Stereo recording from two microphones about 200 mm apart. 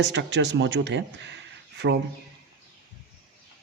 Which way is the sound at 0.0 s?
60° right (ahead or behind).